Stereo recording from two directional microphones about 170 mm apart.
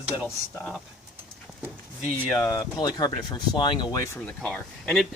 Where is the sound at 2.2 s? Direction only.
15° left (ahead or behind).